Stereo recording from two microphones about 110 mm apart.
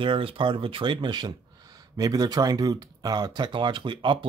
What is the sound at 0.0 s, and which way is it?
Speech, 55° right (ahead or behind).